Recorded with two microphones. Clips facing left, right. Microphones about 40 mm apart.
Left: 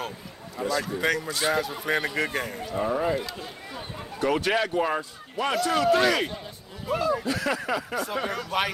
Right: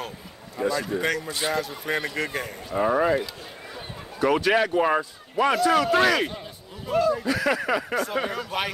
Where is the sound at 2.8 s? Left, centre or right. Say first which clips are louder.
Right 4 dB; right.